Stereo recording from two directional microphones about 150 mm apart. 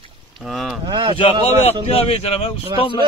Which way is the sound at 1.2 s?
35° left (ahead or behind).